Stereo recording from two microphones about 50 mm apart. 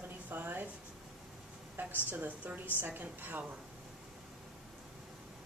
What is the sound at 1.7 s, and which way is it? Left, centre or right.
Speech, right.